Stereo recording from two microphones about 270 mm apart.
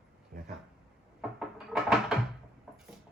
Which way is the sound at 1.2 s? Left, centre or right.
Centre.